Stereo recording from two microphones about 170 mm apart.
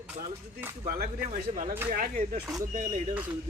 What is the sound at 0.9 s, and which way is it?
Speech, 60° right (ahead or behind).